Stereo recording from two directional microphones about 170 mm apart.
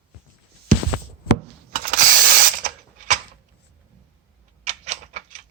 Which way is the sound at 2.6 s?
55° right (ahead or behind).